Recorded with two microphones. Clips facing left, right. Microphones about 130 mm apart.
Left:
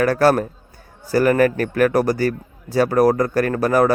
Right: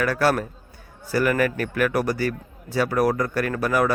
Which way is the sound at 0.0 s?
40° left (ahead or behind).